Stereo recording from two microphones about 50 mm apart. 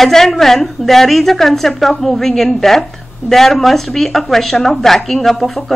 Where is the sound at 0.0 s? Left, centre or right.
Centre.